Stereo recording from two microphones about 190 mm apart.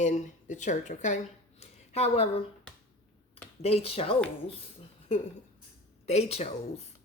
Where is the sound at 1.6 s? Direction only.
35° left (ahead or behind).